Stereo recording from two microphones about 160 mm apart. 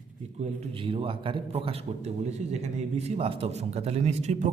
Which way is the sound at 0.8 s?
35° right (ahead or behind).